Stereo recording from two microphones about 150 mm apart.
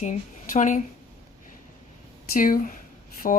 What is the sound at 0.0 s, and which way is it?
Speech, 50° left (ahead or behind).